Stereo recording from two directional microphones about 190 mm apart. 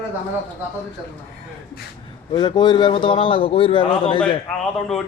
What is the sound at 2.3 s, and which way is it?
A man's voice, 25° left (ahead or behind).